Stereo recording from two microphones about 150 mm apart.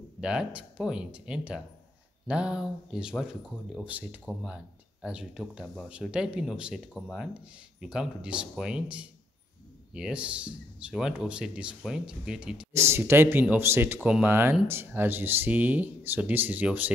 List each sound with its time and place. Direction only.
0.2 s speech: 5° right (ahead or behind)
12.7 s speech: 15° right (ahead or behind)
13.9 s speech: 5° right (ahead or behind)